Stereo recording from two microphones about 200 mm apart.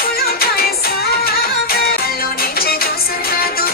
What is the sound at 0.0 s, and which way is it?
Music, 50° left (ahead or behind).